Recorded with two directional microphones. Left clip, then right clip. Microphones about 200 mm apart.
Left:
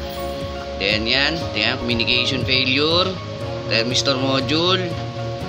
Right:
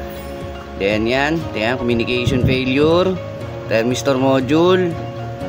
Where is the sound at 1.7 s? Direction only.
35° right (ahead or behind).